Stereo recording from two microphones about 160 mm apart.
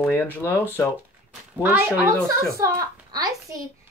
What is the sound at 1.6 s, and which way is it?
Speech, 10° right (ahead or behind).